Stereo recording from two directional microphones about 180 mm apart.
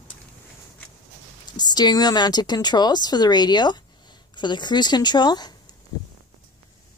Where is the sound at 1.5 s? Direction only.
25° left (ahead or behind).